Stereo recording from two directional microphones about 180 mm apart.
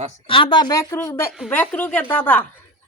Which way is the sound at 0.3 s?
30° left (ahead or behind).